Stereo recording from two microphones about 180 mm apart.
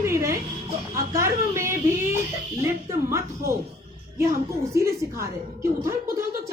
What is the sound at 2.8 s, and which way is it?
Speech, 15° right (ahead or behind).